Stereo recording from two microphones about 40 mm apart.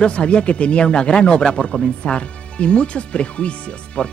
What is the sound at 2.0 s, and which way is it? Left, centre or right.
Music, left.